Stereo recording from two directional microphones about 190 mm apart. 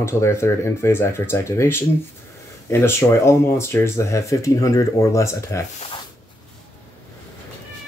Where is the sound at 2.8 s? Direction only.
15° left (ahead or behind).